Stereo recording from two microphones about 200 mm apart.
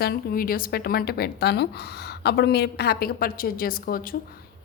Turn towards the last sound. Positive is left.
turn(degrees=45)  # may be behind; listen again after turning